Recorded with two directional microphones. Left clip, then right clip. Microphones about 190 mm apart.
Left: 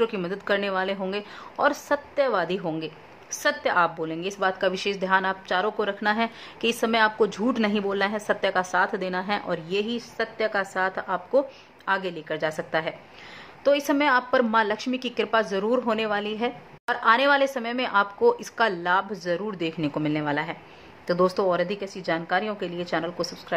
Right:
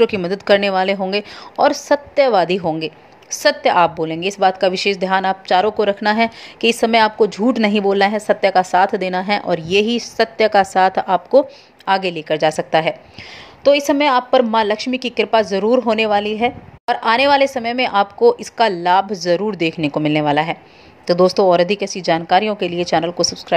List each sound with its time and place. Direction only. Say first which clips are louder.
0.0 s a woman's voice: right 10 dB; 25° right (ahead or behind)